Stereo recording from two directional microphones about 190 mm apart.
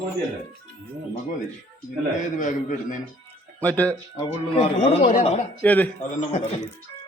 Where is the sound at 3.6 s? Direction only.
10° left (ahead or behind).